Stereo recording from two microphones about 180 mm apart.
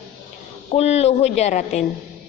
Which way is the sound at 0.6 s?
35° left (ahead or behind).